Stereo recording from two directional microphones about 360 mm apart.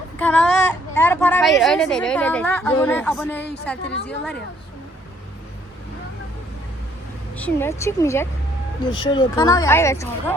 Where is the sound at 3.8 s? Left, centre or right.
Left.